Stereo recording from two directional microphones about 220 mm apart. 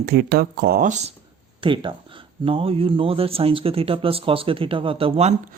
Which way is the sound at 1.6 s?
20° right (ahead or behind).